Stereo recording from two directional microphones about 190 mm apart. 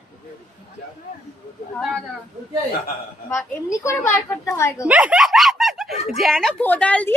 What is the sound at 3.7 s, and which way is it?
A child's voice, 15° left (ahead or behind).